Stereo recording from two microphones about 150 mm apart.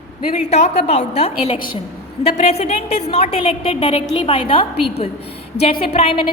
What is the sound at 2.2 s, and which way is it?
A woman's voice, 45° left (ahead or behind).